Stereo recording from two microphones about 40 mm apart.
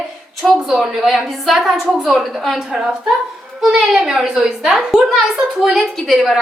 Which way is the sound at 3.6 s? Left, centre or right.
Centre.